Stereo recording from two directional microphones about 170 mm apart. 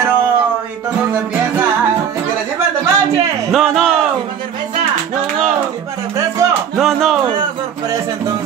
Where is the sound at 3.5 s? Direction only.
Centre (ahead or behind).